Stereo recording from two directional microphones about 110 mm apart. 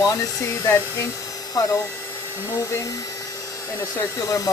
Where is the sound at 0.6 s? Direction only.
25° left (ahead or behind).